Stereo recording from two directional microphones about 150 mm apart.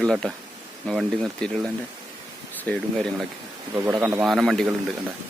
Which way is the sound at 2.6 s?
5° left (ahead or behind).